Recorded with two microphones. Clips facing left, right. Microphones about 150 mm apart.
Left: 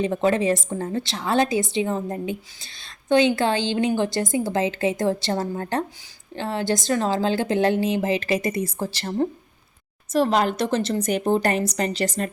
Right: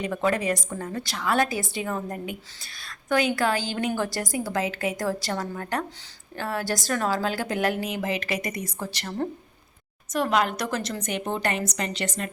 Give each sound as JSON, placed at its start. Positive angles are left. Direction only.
{"t": 0.0, "sound": "a woman's voice", "side_deg": 25}